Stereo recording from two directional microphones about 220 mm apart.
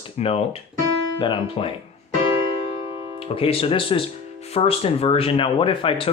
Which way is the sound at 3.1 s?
25° left (ahead or behind).